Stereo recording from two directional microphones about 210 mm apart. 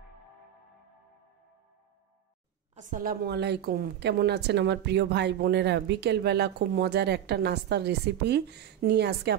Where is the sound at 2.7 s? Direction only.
40° right (ahead or behind).